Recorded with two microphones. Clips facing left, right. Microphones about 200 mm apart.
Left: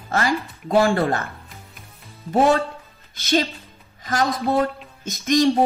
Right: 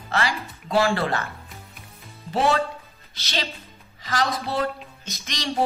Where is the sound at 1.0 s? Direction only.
50° left (ahead or behind).